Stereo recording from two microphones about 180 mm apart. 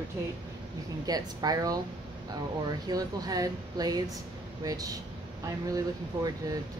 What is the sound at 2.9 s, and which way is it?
Speech, 20° right (ahead or behind).